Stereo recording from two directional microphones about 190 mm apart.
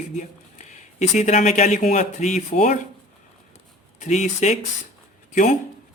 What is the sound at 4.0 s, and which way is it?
Speech, 40° left (ahead or behind).